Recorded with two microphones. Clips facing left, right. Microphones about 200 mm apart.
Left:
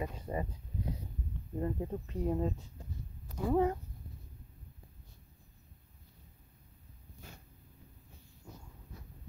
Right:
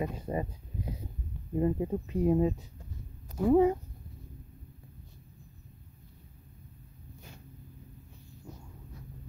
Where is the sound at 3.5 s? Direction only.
10° right (ahead or behind).